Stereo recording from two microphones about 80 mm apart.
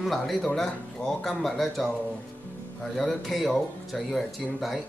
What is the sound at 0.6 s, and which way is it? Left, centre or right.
Speech, centre.